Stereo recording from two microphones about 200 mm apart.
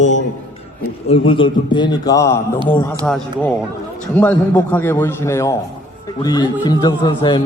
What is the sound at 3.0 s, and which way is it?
A man's voice, centre (ahead or behind).